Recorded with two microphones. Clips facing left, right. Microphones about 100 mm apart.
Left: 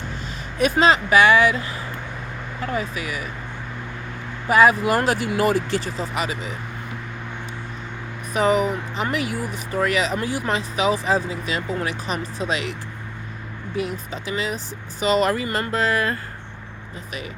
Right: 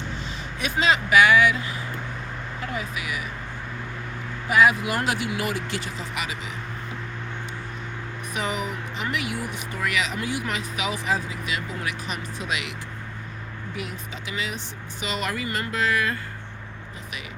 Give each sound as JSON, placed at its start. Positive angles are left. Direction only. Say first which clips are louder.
{"t": 0.6, "sound": "speech", "louder": "left 6 dB", "side_deg": 40}
{"t": 2.7, "sound": "speech", "louder": "left 4 dB", "side_deg": 40}
{"t": 4.4, "sound": "speech", "louder": "left 4 dB", "side_deg": 40}
{"t": 8.3, "sound": "speech", "louder": "left 10 dB", "side_deg": 40}
{"t": 13.7, "sound": "speech", "louder": "left 9 dB", "side_deg": 35}